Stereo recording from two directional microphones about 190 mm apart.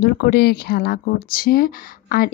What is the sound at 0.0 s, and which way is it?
Speech, 55° left (ahead or behind).